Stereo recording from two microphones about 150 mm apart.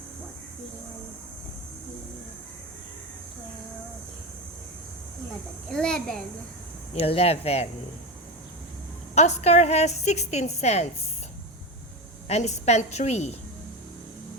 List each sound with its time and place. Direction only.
5.7 s a child's voice: 5° left (ahead or behind)
6.9 s a woman's voice: 40° left (ahead or behind)
9.1 s a woman's voice: 50° left (ahead or behind)
12.3 s a woman's voice: 50° left (ahead or behind)